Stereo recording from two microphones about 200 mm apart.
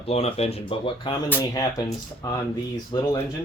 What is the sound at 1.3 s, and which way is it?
Speech, 15° left (ahead or behind).